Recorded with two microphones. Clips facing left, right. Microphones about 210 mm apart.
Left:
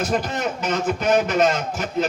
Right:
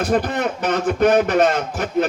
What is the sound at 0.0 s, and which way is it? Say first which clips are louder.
A man's voice: right 4 dB; 55° right (ahead or behind).